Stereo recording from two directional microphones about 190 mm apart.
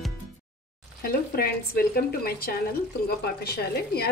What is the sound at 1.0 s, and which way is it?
Speech, 50° left (ahead or behind).